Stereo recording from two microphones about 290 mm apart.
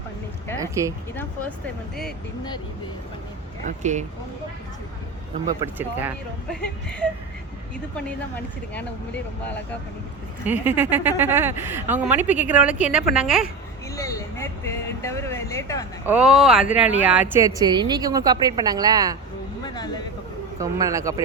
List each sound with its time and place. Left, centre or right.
0.6 s a woman's voice: centre
1.1 s speech: centre
3.7 s speech: right
5.5 s a woman's voice: centre
10.4 s speech: centre
13.9 s a sound: centre
16.0 s a woman's voice: centre
19.6 s a sound: centre
20.6 s a woman's voice: centre